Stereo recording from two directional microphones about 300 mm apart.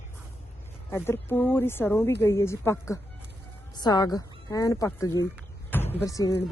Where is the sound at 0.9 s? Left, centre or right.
Centre.